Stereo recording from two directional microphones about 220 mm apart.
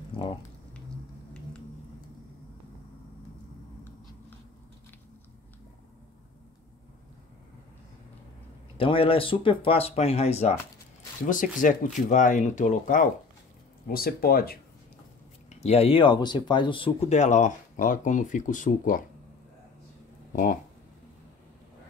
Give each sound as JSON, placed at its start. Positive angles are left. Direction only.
{"t": 8.7, "sound": "speech", "side_deg": 25}
{"t": 15.5, "sound": "speech", "side_deg": 30}